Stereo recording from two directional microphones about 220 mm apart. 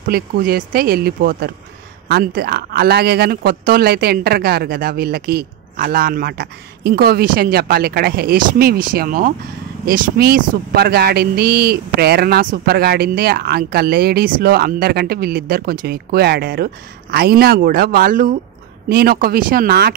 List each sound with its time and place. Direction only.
0.1 s speech: 40° right (ahead or behind)